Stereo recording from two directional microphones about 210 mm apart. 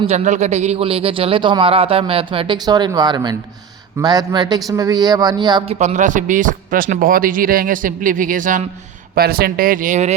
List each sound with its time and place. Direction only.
0.0 s speech: 30° right (ahead or behind)
5.8 s speech: 35° right (ahead or behind)